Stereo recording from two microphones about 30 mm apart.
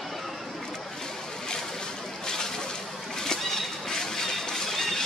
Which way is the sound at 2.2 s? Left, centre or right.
Centre.